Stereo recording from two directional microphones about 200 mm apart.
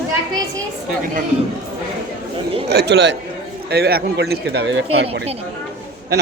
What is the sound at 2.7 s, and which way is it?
Speech, 55° right (ahead or behind).